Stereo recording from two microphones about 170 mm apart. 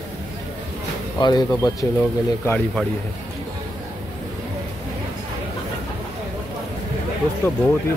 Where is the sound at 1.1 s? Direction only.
25° left (ahead or behind).